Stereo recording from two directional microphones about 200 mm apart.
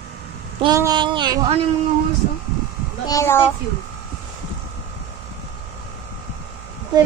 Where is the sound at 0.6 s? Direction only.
20° right (ahead or behind).